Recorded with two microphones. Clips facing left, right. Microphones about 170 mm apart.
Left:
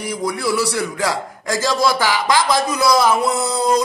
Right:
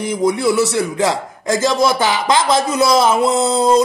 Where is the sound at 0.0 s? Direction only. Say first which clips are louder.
Right 6 dB; 20° right (ahead or behind).